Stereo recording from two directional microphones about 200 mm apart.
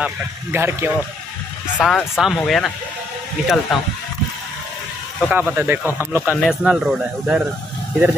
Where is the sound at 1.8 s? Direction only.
Centre (ahead or behind).